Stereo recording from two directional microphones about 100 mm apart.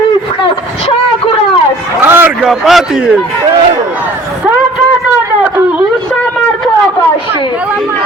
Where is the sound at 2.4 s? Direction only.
5° right (ahead or behind).